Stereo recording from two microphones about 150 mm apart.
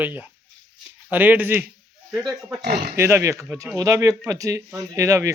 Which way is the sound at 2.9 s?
15° right (ahead or behind).